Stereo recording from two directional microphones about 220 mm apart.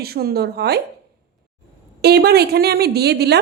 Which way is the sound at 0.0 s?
45° right (ahead or behind).